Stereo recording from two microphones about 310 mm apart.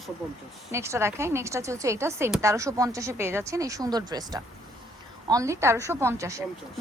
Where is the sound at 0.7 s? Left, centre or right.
Centre.